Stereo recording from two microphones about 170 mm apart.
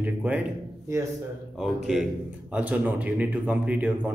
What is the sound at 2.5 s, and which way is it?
Speech, 10° right (ahead or behind).